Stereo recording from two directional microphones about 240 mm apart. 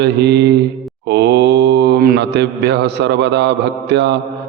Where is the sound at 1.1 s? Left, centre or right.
Right.